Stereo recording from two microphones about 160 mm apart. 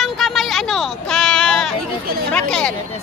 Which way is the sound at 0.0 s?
Centre (ahead or behind).